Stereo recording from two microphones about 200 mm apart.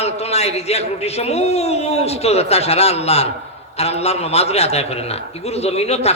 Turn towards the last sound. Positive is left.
turn(degrees=30)  # may be behind; listen again after turning